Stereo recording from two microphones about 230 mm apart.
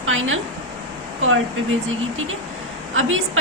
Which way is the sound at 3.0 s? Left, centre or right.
Right.